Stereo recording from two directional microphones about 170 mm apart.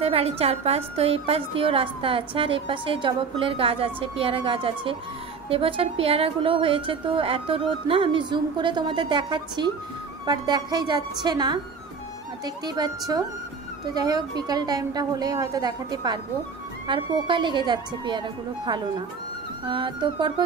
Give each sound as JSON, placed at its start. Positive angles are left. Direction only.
{"t": 0.0, "sound": "a woman's voice", "side_deg": -35}